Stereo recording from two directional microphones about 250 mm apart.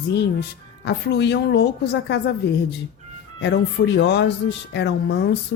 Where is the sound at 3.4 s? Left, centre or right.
Left.